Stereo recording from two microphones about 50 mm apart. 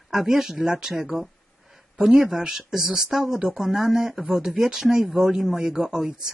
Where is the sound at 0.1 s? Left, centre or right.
Centre.